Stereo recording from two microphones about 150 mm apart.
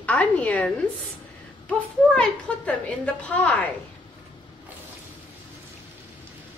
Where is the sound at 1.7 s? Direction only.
5° left (ahead or behind).